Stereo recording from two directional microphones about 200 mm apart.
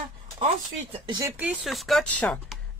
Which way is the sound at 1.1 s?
15° right (ahead or behind).